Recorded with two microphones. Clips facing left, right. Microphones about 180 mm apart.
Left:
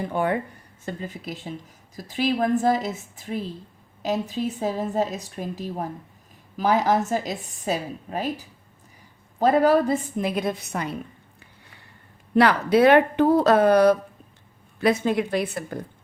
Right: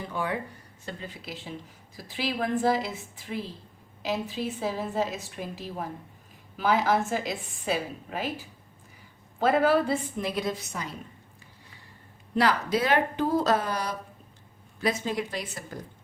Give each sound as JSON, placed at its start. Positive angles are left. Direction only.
{"t": 0.1, "sound": "a woman's voice", "side_deg": 55}
{"t": 12.3, "sound": "speech", "side_deg": 60}